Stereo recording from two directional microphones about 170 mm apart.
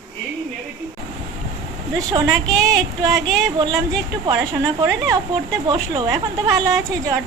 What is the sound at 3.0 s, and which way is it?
Speech, 20° right (ahead or behind).